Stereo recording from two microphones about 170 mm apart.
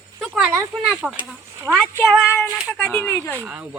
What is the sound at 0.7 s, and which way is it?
Speech, centre (ahead or behind).